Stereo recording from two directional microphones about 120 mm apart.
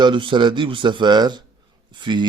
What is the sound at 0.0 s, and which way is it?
A man's voice, 45° right (ahead or behind).